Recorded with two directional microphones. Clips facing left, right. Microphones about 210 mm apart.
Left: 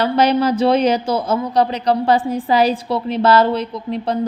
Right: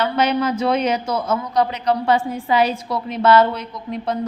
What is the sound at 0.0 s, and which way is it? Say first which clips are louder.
A woman's voice: left 4 dB; 35° left (ahead or behind).